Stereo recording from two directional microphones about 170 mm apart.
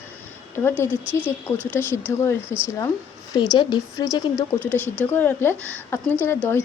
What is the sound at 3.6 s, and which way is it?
A woman's voice, 25° left (ahead or behind).